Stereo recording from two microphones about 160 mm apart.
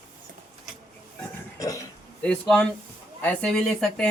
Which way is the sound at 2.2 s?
5° left (ahead or behind).